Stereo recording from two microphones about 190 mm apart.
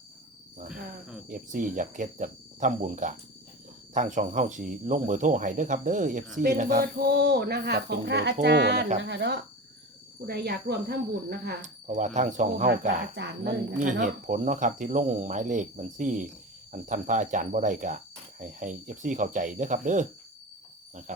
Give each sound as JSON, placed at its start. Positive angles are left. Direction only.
{"t": 1.3, "sound": "speech", "side_deg": -45}
{"t": 11.6, "sound": "speech", "side_deg": -40}
{"t": 13.1, "sound": "speech", "side_deg": -55}
{"t": 14.0, "sound": "speech", "side_deg": -40}
{"t": 21.1, "sound": "speech", "side_deg": -40}